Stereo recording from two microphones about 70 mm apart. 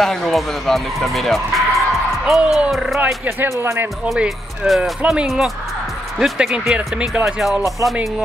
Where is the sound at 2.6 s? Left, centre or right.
Centre.